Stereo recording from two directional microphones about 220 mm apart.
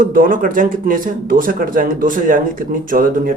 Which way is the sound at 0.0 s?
40° right (ahead or behind).